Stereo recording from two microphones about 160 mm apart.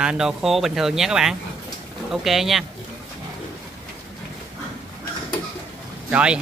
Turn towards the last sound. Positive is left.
turn(degrees=-5)  # may be behind; listen again after turning